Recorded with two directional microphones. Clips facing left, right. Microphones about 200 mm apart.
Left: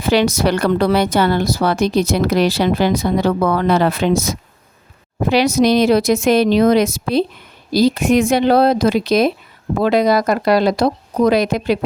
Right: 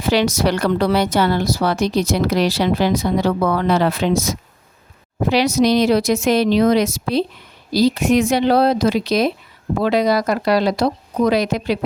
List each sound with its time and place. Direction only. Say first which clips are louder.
0.0 s a woman's voice: left 2 dB; 55° left (ahead or behind)